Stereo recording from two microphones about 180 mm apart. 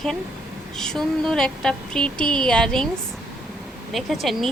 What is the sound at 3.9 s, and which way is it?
Speech, centre (ahead or behind).